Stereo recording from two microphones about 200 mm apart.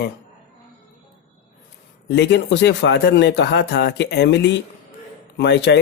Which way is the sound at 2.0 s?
60° left (ahead or behind).